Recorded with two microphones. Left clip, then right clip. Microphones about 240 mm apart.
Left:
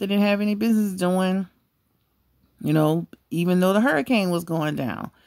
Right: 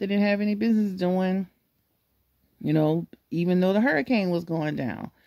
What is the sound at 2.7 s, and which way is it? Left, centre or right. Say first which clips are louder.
Speech: left 2 dB; left.